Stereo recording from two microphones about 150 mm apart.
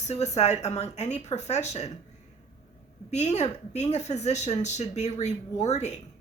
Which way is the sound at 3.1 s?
45° left (ahead or behind).